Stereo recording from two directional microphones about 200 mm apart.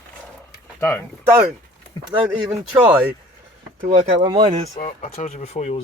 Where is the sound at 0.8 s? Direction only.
10° left (ahead or behind).